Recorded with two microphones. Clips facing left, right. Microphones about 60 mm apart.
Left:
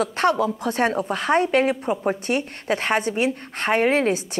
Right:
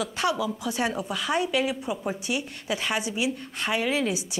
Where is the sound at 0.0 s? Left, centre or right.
Left.